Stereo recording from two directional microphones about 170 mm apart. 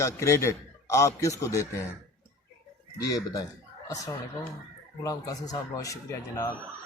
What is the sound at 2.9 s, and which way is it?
Speech, 20° left (ahead or behind).